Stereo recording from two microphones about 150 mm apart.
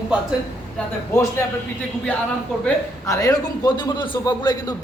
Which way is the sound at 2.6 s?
20° left (ahead or behind).